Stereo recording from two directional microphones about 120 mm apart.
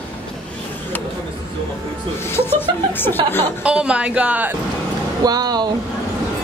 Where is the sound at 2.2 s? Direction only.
20° left (ahead or behind).